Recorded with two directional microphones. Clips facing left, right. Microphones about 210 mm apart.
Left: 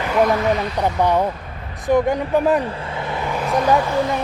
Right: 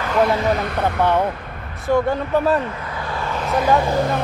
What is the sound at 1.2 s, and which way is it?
Vehicle, 60° right (ahead or behind).